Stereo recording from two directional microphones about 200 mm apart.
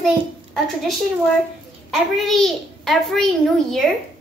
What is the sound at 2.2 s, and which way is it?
A child's voice, centre (ahead or behind).